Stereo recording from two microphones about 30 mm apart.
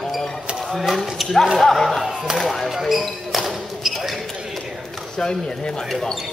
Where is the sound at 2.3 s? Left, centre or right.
Centre.